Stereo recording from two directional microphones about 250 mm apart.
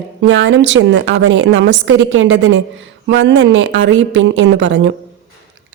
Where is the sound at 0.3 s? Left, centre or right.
Right.